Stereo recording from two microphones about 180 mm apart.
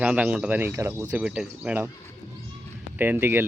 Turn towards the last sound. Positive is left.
turn(degrees=-10)  # may be behind; listen again after turning